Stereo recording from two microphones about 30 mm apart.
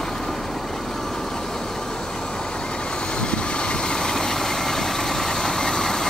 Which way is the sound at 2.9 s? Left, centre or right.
Left.